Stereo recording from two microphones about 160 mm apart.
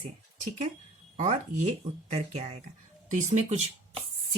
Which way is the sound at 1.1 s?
50° right (ahead or behind).